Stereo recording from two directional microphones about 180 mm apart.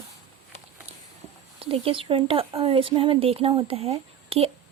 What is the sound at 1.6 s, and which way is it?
Speech, 30° right (ahead or behind).